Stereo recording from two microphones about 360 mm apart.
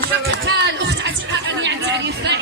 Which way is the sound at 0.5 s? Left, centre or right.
Right.